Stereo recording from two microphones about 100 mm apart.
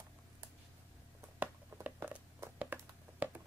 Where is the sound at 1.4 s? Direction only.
15° right (ahead or behind).